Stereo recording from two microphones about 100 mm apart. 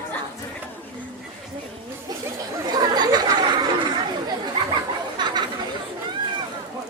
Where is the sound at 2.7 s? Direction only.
45° right (ahead or behind).